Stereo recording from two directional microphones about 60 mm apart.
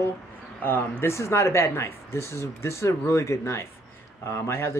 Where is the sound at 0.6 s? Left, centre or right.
Left.